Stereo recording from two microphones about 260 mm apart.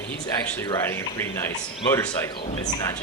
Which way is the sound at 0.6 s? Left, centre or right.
Centre.